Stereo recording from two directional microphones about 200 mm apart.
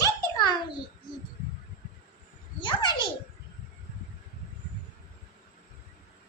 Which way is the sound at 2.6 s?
25° left (ahead or behind).